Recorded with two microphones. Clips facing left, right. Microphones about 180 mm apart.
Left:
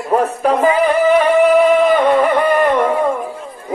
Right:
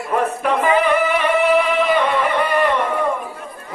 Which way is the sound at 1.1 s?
45° left (ahead or behind).